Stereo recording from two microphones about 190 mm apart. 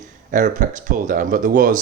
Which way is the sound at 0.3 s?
40° right (ahead or behind).